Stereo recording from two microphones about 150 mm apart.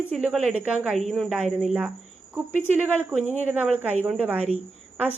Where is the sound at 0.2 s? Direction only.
5° right (ahead or behind).